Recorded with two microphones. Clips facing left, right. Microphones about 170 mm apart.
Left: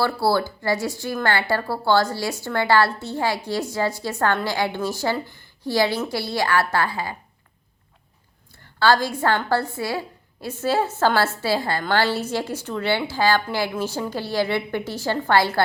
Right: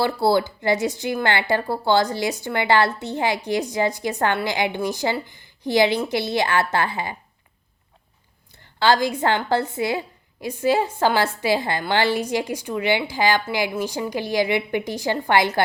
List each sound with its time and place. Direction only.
0.0 s speech: 20° right (ahead or behind)
8.5 s a woman's voice: 20° right (ahead or behind)